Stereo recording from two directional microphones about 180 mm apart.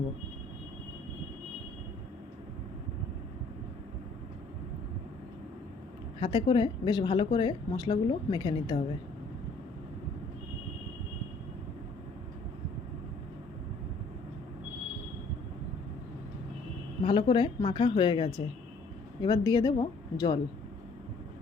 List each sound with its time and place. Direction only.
6.1 s a woman's voice: 30° left (ahead or behind)
17.0 s a woman's voice: 30° left (ahead or behind)